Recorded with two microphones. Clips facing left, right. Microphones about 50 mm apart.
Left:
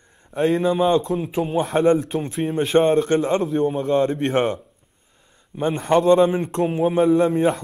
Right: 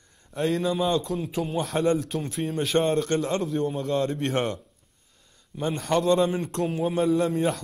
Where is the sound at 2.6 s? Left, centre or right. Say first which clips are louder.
Left 7 dB; left.